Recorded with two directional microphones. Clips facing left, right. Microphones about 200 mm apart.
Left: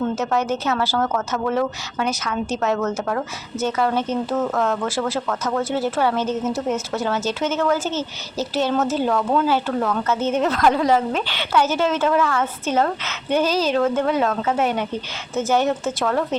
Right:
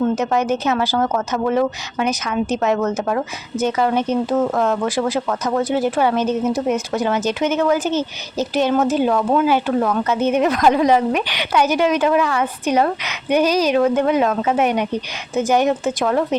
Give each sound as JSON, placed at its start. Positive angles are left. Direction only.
{"t": 0.2, "sound": "speech", "side_deg": -15}